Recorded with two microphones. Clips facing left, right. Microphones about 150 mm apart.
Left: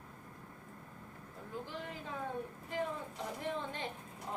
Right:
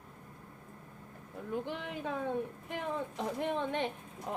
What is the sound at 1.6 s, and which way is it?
Speech, 65° right (ahead or behind).